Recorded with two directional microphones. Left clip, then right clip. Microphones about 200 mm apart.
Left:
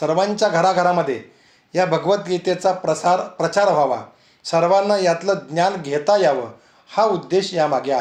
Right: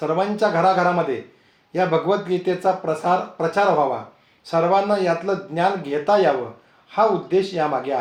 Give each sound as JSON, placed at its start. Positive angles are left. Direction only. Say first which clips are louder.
{"t": 0.0, "sound": "speech", "louder": "left 2 dB", "side_deg": 40}